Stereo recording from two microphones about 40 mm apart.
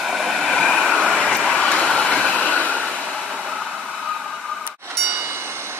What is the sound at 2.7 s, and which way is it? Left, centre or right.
Vehicle, right.